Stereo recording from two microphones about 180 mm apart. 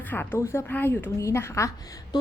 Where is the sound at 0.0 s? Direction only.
10° left (ahead or behind).